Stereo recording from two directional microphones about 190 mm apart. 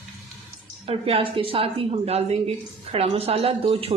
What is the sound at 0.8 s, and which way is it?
Speech, 30° right (ahead or behind).